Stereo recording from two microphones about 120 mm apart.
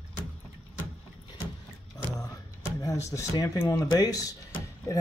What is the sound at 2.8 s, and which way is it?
Speech, 30° left (ahead or behind).